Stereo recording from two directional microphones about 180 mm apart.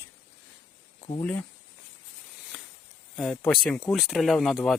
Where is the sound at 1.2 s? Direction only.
10° left (ahead or behind).